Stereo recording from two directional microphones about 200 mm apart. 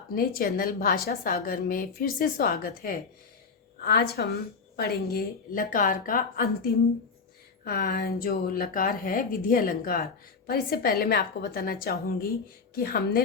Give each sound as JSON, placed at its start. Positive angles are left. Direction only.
{"t": 0.1, "sound": "a woman's voice", "side_deg": 45}